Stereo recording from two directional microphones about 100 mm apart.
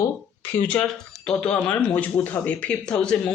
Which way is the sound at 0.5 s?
15° left (ahead or behind).